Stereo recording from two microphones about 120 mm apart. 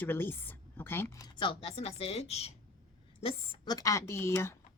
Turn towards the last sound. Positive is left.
turn(degrees=20)  # may be behind; listen again after turning